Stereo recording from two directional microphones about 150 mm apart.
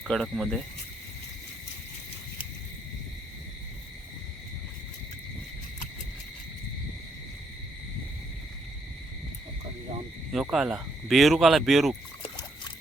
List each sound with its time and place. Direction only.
0.0 s speech: centre (ahead or behind)
10.3 s speech: 5° right (ahead or behind)